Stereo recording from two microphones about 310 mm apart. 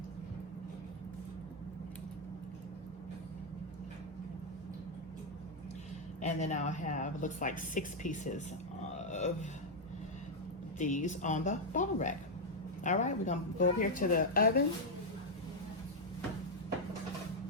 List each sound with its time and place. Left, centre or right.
6.2 s a woman's voice: left
9.0 s a sound: left
10.8 s a woman's voice: left